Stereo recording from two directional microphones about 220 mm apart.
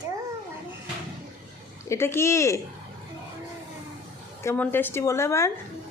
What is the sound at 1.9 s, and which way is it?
Speech, 10° left (ahead or behind).